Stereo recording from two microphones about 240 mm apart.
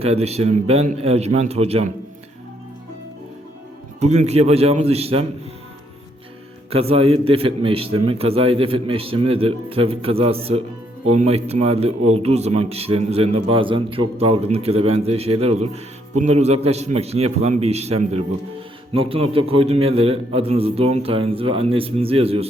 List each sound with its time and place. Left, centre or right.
0.0 s a man's voice: right
4.0 s a man's voice: right
6.7 s a man's voice: right